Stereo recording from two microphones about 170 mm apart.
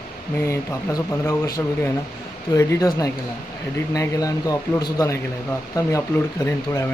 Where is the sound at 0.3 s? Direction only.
15° left (ahead or behind).